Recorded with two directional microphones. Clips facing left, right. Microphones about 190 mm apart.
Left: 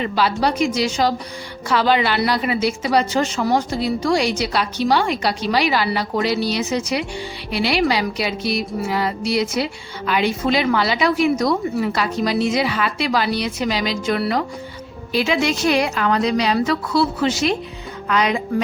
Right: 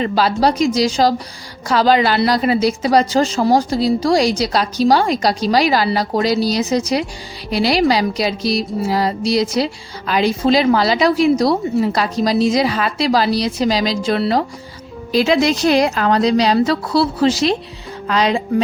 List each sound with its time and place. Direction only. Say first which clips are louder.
0.0 s a woman's voice: right 4 dB; 40° right (ahead or behind)